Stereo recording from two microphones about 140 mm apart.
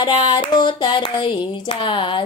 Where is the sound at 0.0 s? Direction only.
35° left (ahead or behind).